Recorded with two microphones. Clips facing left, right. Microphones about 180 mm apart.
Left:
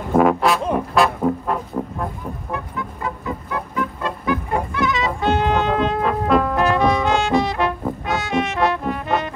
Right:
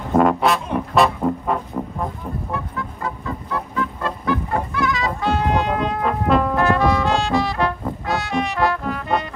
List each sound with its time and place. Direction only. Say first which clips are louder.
0.1 s music: left 1 dB; centre (ahead or behind)
3.3 s music: even; 15° left (ahead or behind)
6.0 s brass instrument: right 2 dB; centre (ahead or behind)
6.5 s brass instrument: even; 20° left (ahead or behind)
8.1 s music: even; 20° left (ahead or behind)